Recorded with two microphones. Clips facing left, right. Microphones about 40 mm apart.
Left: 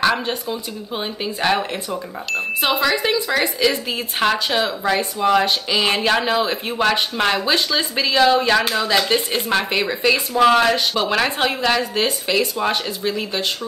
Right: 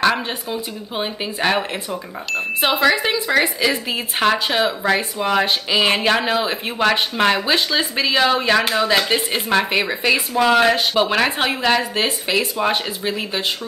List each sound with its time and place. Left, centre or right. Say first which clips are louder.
0.3 s a woman's voice: left 1 dB; centre